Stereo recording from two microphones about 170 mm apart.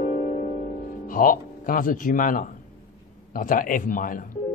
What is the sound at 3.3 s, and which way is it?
Speech, 55° left (ahead or behind).